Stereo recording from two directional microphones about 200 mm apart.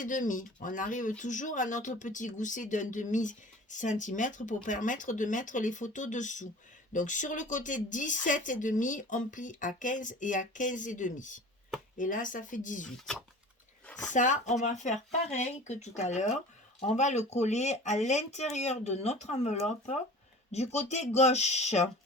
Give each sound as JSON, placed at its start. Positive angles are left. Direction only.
{"t": 0.0, "sound": "speech", "side_deg": 40}
{"t": 13.8, "sound": "a sound", "side_deg": 5}
{"t": 14.1, "sound": "speech", "side_deg": 40}